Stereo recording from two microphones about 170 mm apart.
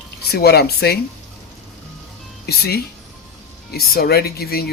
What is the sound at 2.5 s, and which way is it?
Speech, 65° left (ahead or behind).